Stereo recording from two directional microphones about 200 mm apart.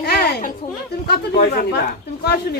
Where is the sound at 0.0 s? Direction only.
55° left (ahead or behind).